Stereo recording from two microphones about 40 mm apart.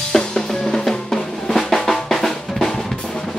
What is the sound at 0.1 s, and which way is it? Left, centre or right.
Drum, centre.